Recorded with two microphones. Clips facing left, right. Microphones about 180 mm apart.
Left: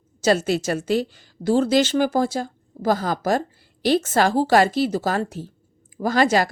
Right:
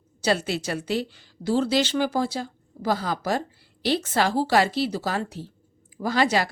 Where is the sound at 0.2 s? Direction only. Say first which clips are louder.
Left 5 dB; 45° left (ahead or behind).